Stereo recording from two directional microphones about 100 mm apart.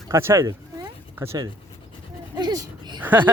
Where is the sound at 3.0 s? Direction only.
15° right (ahead or behind).